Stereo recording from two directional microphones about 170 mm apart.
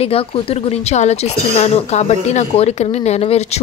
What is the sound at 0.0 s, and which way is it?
Speech, 35° left (ahead or behind).